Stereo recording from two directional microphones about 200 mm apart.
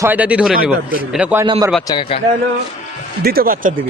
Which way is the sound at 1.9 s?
25° left (ahead or behind).